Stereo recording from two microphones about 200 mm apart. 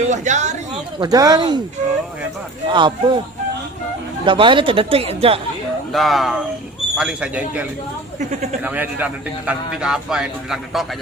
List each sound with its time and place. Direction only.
0.1 s a woman's voice: 35° right (ahead or behind)
0.9 s speech: 20° right (ahead or behind)
2.6 s speech: 25° right (ahead or behind)
4.3 s speech: 25° right (ahead or behind)
5.9 s a man's voice: centre (ahead or behind)